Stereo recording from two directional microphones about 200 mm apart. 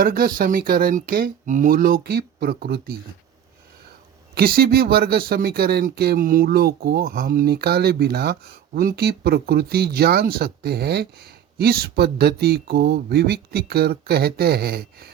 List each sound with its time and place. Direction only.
0.0 s speech: 45° right (ahead or behind)
4.4 s speech: 50° right (ahead or behind)